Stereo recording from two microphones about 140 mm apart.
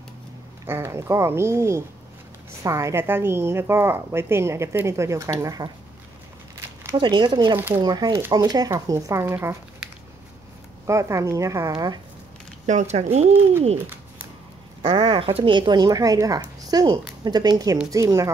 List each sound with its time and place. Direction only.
0.7 s a woman's voice: 20° right (ahead or behind)
6.9 s speech: 35° right (ahead or behind)
7.5 s speech: 15° right (ahead or behind)
7.8 s a woman's voice: 30° right (ahead or behind)
10.9 s a woman's voice: 20° right (ahead or behind)
12.6 s speech: 55° right (ahead or behind)
13.7 s a sound: 15° right (ahead or behind)
14.8 s a woman's voice: 45° right (ahead or behind); by 18.3 s 20° right (ahead or behind)